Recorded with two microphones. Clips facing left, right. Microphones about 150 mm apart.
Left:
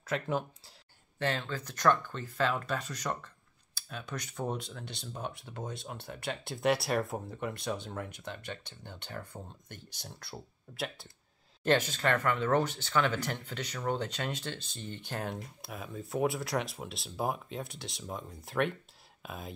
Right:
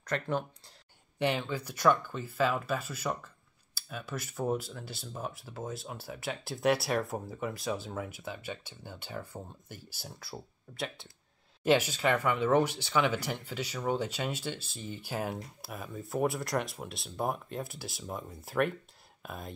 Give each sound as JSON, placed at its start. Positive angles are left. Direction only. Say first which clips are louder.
{"t": 0.0, "sound": "speech", "louder": "even", "side_deg": 5}
{"t": 1.2, "sound": "speech", "louder": "right 3 dB", "side_deg": -10}
{"t": 11.6, "sound": "speech", "louder": "right 2 dB", "side_deg": -10}